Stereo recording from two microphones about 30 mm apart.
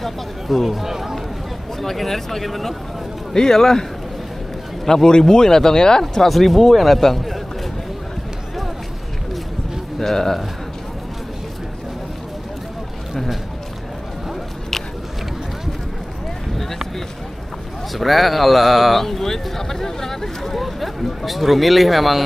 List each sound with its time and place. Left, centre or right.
0.0 s speech: centre
0.7 s speech: centre
1.8 s speech: centre
3.3 s speech: centre
4.8 s speech: left
6.2 s speech: centre
9.9 s speech: centre
17.9 s a sound: centre
20.6 s speech: centre